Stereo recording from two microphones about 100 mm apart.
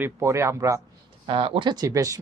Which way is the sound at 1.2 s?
60° right (ahead or behind).